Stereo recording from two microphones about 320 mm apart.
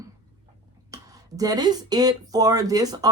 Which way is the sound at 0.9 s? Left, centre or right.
Centre.